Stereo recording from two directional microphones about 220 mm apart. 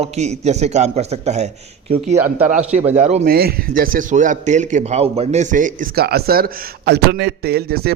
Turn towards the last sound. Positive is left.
turn(degrees=-45)  # may be behind; listen again after turning